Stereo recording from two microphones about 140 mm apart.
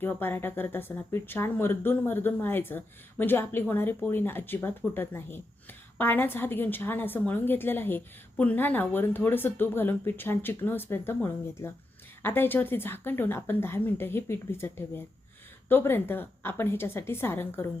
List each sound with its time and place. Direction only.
0.0 s a woman's voice: 15° left (ahead or behind)